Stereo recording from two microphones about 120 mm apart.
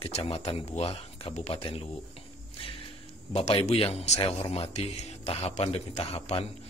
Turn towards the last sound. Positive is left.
turn(degrees=60)  # may be behind; listen again after turning